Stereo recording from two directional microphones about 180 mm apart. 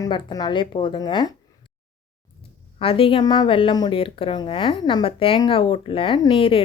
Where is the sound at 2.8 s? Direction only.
30° left (ahead or behind).